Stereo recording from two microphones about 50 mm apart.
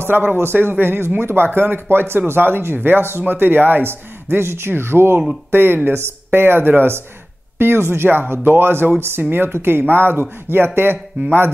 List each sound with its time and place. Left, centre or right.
0.0 s speech: right